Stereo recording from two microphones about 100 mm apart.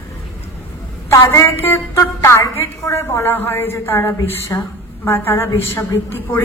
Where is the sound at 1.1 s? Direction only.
30° left (ahead or behind).